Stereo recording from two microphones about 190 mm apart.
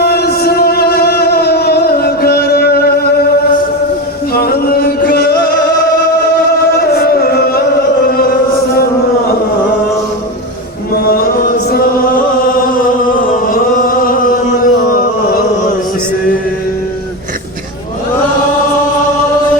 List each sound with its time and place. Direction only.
0.0 s a sound: 55° left (ahead or behind)
4.4 s music: 55° left (ahead or behind)
6.7 s music: 55° left (ahead or behind)
8.1 s chant: 55° left (ahead or behind)
11.4 s chant: 50° left (ahead or behind)
13.5 s chant: 45° left (ahead or behind)